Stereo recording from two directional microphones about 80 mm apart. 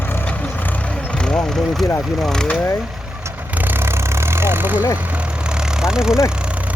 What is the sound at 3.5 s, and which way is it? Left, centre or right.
Vehicle, right.